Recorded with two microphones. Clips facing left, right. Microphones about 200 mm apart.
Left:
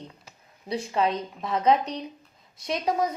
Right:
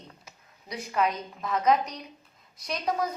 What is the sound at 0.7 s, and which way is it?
A woman's voice, 30° left (ahead or behind).